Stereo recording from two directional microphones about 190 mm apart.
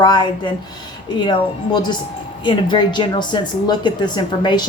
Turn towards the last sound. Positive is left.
turn(degrees=25)  # may be behind; listen again after turning